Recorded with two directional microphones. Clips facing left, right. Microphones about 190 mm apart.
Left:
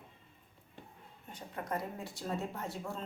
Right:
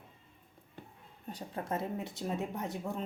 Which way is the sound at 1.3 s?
35° right (ahead or behind).